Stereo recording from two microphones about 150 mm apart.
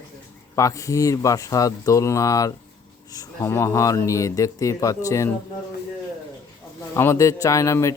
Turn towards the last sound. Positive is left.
turn(degrees=20)  # may be behind; listen again after turning